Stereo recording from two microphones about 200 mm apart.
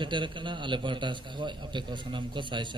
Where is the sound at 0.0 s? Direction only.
25° right (ahead or behind).